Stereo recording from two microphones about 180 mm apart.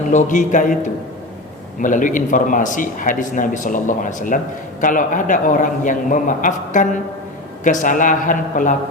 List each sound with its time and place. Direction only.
0.1 s a man's voice: 45° left (ahead or behind)